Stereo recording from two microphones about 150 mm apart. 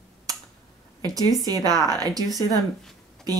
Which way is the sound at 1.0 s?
25° right (ahead or behind).